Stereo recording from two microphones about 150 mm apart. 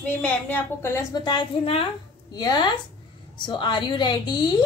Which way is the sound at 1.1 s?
30° left (ahead or behind).